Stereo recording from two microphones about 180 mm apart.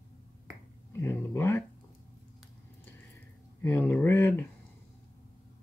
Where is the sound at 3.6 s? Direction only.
10° left (ahead or behind).